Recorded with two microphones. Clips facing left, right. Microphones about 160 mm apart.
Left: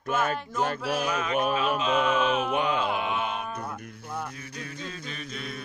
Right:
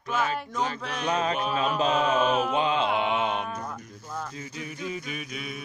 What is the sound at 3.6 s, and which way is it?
Music, 10° left (ahead or behind).